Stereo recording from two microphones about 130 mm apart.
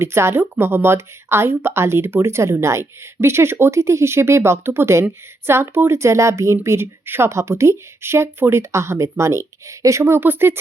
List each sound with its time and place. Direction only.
0.0 s speech: 20° right (ahead or behind)